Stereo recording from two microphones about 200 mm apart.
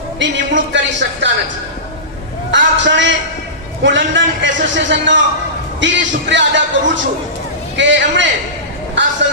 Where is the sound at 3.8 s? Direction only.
65° right (ahead or behind).